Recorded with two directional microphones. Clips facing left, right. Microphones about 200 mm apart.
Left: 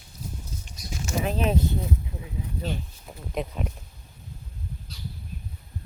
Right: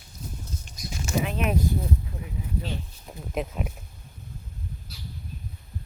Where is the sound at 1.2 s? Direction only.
35° left (ahead or behind).